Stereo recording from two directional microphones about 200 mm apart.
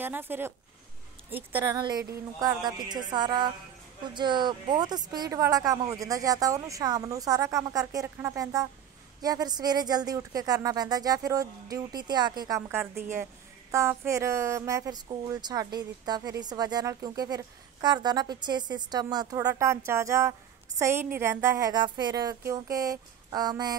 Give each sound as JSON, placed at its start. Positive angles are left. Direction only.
{"t": 0.0, "sound": "speech", "side_deg": -10}
{"t": 2.4, "sound": "speech", "side_deg": -20}